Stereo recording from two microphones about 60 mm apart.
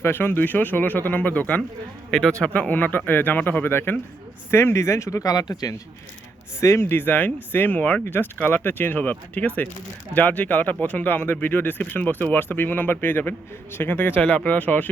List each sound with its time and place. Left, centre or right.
0.0 s speech: left
2.0 s speech: centre
2.4 s speech: left
6.6 s speech: left